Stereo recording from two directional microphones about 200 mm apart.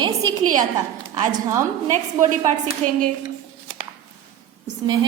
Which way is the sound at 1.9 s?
40° right (ahead or behind).